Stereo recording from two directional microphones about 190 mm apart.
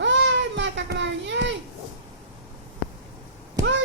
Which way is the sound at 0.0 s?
70° right (ahead or behind).